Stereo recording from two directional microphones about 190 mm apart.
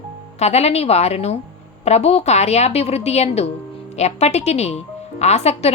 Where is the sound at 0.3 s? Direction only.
35° left (ahead or behind).